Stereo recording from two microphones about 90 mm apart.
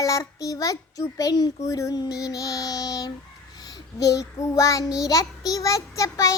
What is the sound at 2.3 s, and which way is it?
Child singing, 40° left (ahead or behind).